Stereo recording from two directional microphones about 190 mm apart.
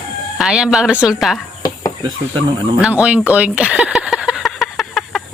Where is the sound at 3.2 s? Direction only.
5° right (ahead or behind).